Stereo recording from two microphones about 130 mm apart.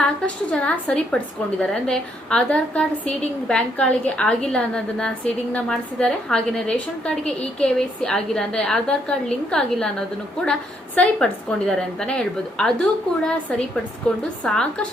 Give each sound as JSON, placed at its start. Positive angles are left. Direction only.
{"t": 0.5, "sound": "a woman's voice", "side_deg": 5}